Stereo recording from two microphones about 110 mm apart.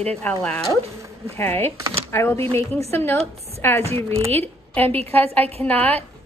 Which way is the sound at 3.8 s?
65° right (ahead or behind).